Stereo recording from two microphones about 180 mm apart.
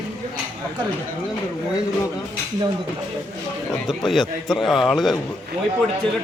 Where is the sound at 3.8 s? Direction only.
Centre (ahead or behind).